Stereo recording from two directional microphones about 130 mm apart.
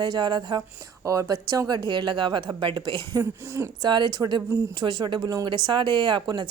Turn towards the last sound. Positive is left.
turn(degrees=-35)  # may be behind; listen again after turning